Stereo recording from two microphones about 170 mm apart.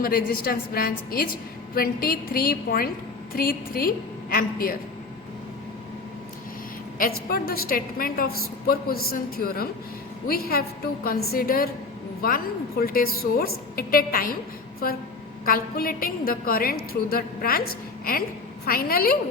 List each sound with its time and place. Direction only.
0.0 s a woman's voice: 60° left (ahead or behind)
7.0 s a woman's voice: 60° left (ahead or behind)
15.4 s a woman's voice: 60° left (ahead or behind)